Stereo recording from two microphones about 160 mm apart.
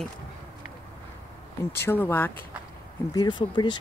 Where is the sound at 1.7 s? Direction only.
15° left (ahead or behind).